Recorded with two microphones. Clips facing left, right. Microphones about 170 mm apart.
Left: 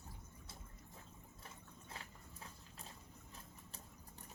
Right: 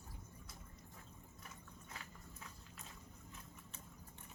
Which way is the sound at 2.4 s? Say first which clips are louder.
Left 3 dB; 30° left (ahead or behind).